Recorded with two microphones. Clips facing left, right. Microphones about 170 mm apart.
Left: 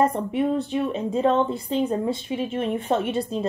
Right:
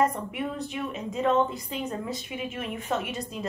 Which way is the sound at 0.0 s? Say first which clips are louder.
Left 5 dB; 30° left (ahead or behind).